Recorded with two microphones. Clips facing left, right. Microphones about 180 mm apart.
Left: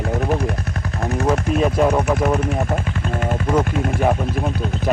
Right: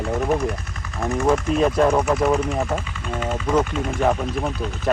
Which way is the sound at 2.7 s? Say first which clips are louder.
Left 4 dB; 55° left (ahead or behind).